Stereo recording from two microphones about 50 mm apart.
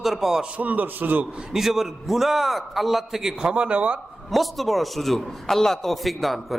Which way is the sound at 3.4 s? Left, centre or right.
Centre.